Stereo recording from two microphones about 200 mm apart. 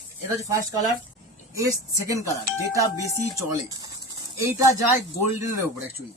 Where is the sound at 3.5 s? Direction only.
15° right (ahead or behind).